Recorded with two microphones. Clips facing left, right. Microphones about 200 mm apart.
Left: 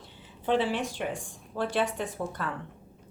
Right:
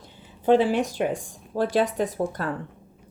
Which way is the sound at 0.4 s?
45° right (ahead or behind).